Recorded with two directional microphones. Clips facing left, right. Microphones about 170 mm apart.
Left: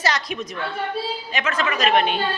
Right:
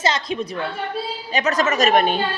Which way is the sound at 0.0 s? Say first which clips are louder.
Right 3 dB; 25° right (ahead or behind).